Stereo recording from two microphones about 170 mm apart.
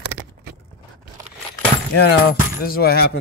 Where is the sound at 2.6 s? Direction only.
65° left (ahead or behind).